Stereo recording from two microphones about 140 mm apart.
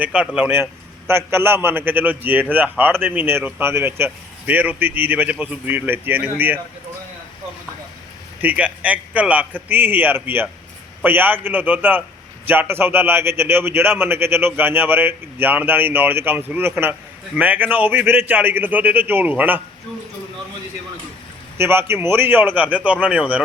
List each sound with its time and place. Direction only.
0.0 s a man's voice: 10° right (ahead or behind)
8.4 s a man's voice: 10° right (ahead or behind)
21.6 s a man's voice: 15° right (ahead or behind)